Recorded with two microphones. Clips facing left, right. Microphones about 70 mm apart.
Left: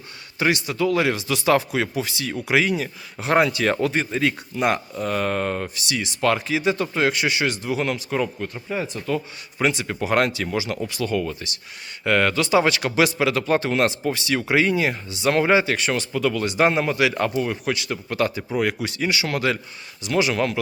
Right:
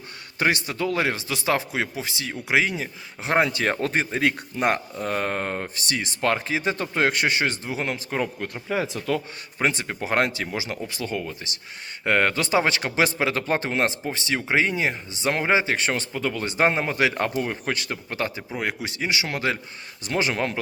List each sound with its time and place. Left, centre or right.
0.3 s speech: right
3.8 s speech: right
17.9 s speech: right
20.0 s speech: right